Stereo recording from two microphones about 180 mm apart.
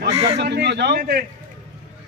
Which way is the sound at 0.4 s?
70° right (ahead or behind).